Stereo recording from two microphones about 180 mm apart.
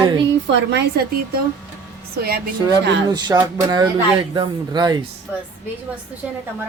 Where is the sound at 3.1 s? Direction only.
20° right (ahead or behind).